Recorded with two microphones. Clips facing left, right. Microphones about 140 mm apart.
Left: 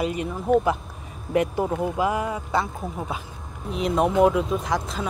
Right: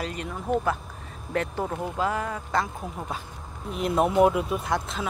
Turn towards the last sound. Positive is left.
turn(degrees=0)  # may be behind; listen again after turning